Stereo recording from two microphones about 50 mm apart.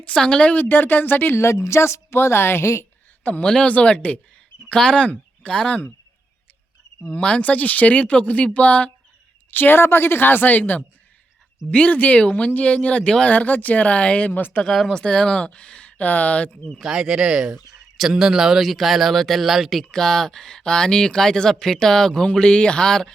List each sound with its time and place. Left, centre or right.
0.0 s speech: centre
0.5 s speech: left
1.4 s a woman's voice: left
3.4 s speech: centre
7.0 s speech: left
9.5 s a woman's voice: left
14.9 s speech: centre
16.8 s speech: centre
19.8 s speech: centre